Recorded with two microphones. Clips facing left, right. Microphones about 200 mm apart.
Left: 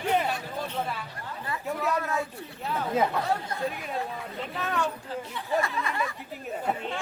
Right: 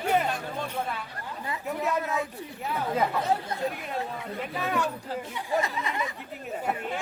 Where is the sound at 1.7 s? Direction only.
Centre (ahead or behind).